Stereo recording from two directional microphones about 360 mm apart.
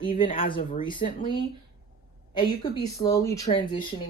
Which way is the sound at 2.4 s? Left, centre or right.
Centre.